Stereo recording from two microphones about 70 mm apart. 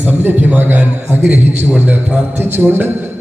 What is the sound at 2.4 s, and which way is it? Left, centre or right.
Speech, right.